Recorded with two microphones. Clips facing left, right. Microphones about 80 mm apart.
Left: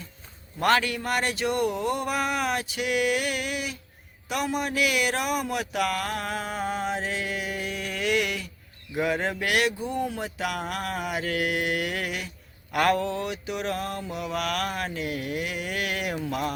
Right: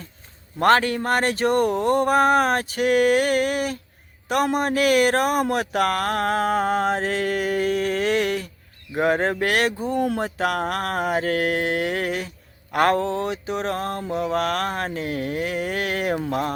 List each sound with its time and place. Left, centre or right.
0.6 s speech: right
8.9 s mantra: right